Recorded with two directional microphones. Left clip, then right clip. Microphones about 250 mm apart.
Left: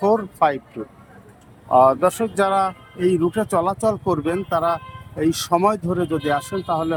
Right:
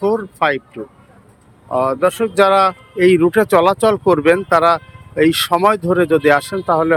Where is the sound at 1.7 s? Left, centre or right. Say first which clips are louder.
Left 1 dB; centre.